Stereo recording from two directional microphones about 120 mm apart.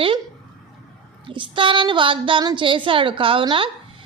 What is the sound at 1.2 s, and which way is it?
A woman's voice, 45° right (ahead or behind).